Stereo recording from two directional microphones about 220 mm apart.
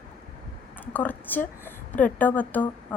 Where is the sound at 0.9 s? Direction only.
10° left (ahead or behind).